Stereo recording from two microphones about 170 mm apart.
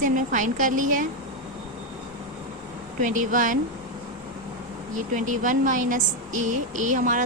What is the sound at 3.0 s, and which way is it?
Speech, 50° right (ahead or behind).